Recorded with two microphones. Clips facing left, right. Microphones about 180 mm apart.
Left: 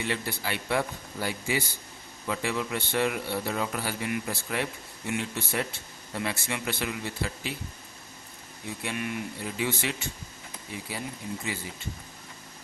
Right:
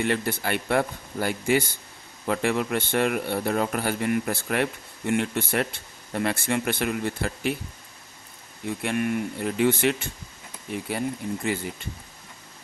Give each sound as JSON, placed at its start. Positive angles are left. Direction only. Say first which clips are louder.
{"t": 0.0, "sound": "a man's voice", "louder": "right 6 dB", "side_deg": -55}
{"t": 8.6, "sound": "a man's voice", "louder": "right 7 dB", "side_deg": -55}